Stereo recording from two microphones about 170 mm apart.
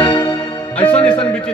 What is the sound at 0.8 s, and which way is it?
Speech, 10° left (ahead or behind).